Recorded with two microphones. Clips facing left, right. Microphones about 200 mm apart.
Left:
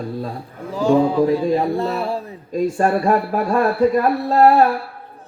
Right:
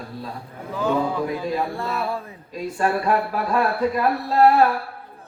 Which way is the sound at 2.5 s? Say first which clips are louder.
Left 6 dB; 45° left (ahead or behind).